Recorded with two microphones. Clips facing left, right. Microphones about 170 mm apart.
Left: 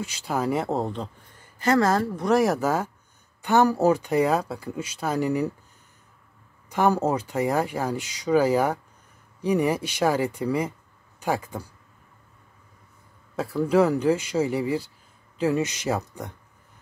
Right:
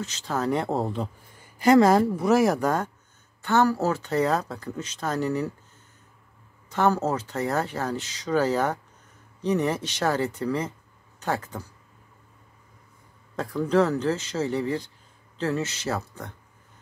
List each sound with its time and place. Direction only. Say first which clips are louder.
0.0 s speech: left 1 dB; 10° left (ahead or behind)
1.6 s speech: right 4 dB; 15° right (ahead or behind)
2.1 s speech: even; 5° right (ahead or behind)
3.4 s speech: left 3 dB; 15° left (ahead or behind)
6.7 s speech: left 1 dB; 15° left (ahead or behind)
13.4 s speech: left 2 dB; 5° left (ahead or behind)